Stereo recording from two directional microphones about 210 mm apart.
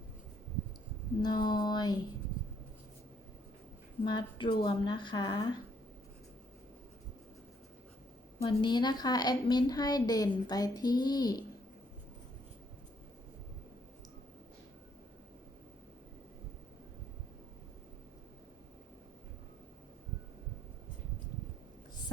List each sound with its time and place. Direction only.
1.2 s a sound: 20° left (ahead or behind)
4.0 s a woman's voice: 20° left (ahead or behind)
8.4 s a woman's voice: 20° left (ahead or behind)